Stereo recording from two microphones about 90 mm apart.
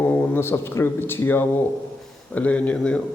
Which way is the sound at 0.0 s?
25° left (ahead or behind).